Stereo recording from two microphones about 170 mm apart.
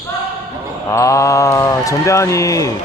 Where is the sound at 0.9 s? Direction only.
20° left (ahead or behind).